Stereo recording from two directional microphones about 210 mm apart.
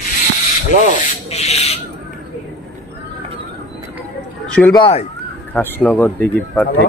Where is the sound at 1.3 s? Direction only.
30° left (ahead or behind).